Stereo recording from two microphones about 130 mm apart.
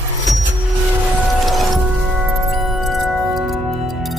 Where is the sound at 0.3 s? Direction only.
Centre (ahead or behind).